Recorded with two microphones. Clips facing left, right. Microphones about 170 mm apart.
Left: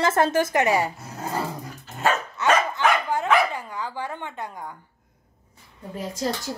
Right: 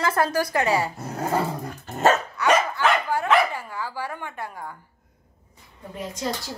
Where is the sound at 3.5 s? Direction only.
20° left (ahead or behind).